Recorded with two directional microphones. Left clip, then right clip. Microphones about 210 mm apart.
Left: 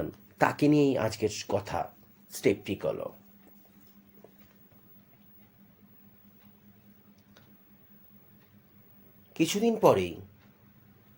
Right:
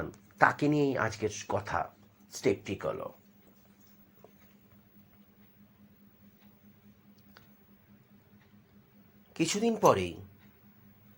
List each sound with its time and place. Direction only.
0.3 s speech: 20° left (ahead or behind)
9.3 s speech: centre (ahead or behind)